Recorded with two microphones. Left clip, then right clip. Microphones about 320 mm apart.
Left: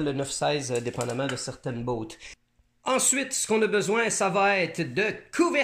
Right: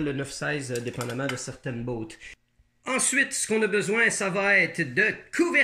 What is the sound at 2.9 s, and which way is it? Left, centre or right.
Speech, left.